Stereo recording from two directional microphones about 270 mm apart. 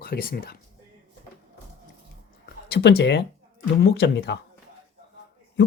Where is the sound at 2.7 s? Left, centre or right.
Left.